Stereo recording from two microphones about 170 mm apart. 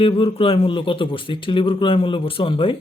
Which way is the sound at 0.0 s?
30° left (ahead or behind).